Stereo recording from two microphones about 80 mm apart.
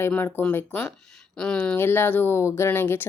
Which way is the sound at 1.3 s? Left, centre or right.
Centre.